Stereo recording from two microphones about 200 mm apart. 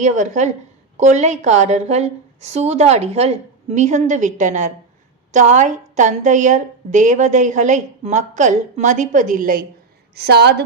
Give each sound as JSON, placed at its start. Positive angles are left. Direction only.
{"t": 0.0, "sound": "a woman's voice", "side_deg": -40}